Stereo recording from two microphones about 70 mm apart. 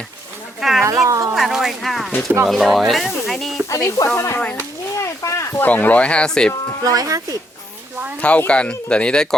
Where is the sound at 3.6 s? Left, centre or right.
Left.